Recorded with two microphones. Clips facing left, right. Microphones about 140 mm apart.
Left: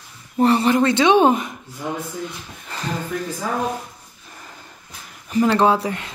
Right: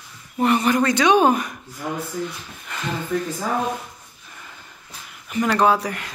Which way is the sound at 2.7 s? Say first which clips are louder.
Left 1 dB; 35° left (ahead or behind).